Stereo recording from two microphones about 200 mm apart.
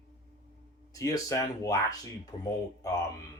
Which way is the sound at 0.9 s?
15° left (ahead or behind).